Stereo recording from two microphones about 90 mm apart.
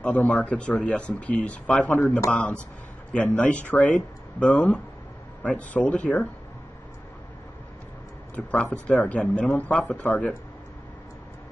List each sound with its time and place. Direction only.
0.0 s speech: 15° left (ahead or behind)
2.0 s a man's voice: 25° left (ahead or behind)
2.3 s speech: 10° left (ahead or behind)
8.4 s speech: 15° left (ahead or behind)